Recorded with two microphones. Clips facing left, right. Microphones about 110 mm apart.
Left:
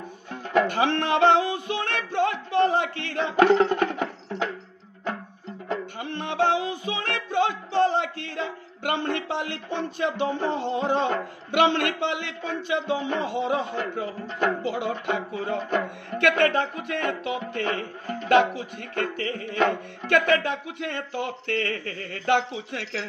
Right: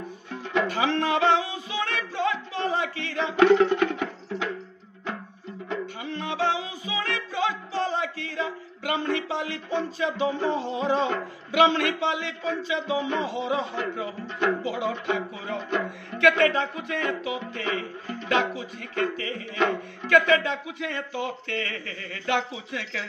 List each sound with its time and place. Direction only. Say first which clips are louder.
0.5 s speech: left 3 dB; 55° left (ahead or behind)
3.5 s music: even; 40° left (ahead or behind)
5.7 s music: left 1 dB; 55° left (ahead or behind)
15.3 s speech: left 3 dB; 50° left (ahead or behind)